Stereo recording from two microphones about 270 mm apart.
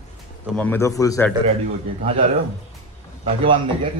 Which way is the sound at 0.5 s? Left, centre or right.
Centre.